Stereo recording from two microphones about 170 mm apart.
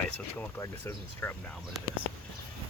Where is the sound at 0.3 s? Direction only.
10° left (ahead or behind).